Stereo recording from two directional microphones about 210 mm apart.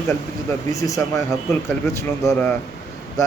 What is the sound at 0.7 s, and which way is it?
Speech, 15° left (ahead or behind).